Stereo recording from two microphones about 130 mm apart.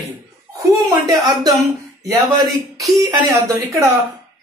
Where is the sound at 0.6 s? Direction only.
25° right (ahead or behind).